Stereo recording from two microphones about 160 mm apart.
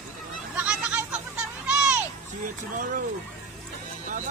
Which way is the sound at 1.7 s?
5° right (ahead or behind).